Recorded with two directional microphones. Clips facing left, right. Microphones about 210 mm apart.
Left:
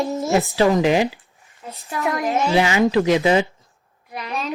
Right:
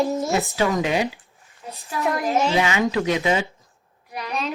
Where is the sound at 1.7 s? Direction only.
Centre (ahead or behind).